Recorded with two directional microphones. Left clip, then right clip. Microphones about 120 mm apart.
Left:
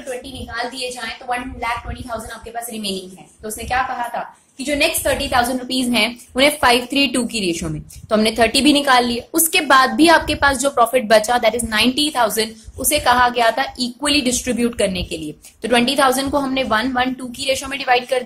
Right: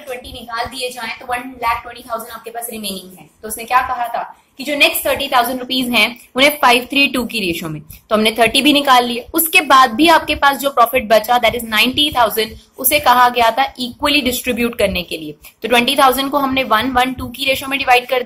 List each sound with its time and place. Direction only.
0.5 s a woman's voice: 15° left (ahead or behind)
2.7 s a woman's voice: centre (ahead or behind)
4.1 s a woman's voice: 35° left (ahead or behind)
12.7 s a woman's voice: 20° left (ahead or behind)